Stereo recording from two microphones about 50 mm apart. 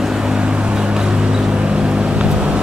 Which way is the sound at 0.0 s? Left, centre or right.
Centre.